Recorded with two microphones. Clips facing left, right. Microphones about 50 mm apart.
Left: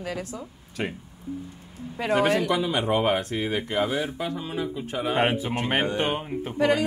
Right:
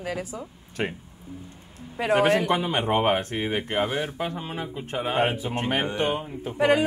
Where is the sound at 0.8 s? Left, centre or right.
Right.